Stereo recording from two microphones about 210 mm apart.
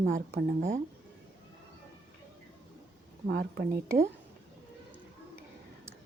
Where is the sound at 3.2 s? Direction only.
45° right (ahead or behind).